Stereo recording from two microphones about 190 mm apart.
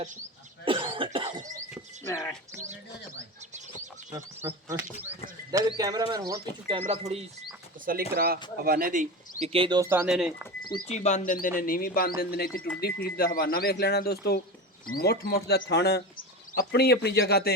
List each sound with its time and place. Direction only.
0.6 s cough: 25° right (ahead or behind)
2.0 s speech: 15° left (ahead or behind)
4.1 s speech: 15° right (ahead or behind)
6.7 s speech: 30° right (ahead or behind)
8.1 s speech: 55° right (ahead or behind); by 10.5 s 5° right (ahead or behind)
10.8 s speech: 40° left (ahead or behind); by 17.5 s 60° left (ahead or behind)